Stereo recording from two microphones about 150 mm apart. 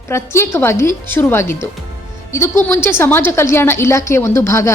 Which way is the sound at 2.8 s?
15° left (ahead or behind).